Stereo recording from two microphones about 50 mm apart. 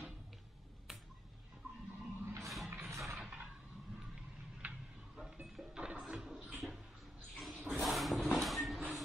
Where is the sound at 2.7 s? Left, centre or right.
Right.